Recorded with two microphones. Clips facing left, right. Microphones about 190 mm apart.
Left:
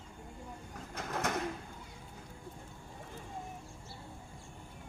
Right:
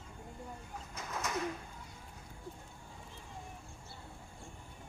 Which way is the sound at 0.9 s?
60° left (ahead or behind).